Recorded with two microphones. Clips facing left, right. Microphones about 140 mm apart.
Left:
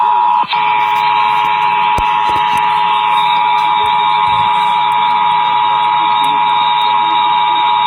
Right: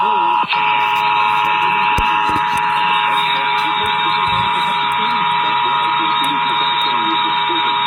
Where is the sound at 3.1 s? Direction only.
40° left (ahead or behind).